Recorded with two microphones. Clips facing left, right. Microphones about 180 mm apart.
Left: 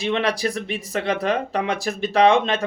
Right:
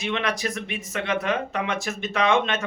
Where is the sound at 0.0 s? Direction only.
35° left (ahead or behind).